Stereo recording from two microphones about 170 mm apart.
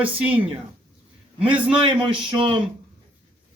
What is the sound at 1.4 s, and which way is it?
Speech, 5° right (ahead or behind).